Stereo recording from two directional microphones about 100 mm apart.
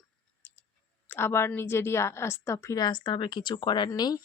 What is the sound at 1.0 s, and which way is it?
Speech, 25° left (ahead or behind).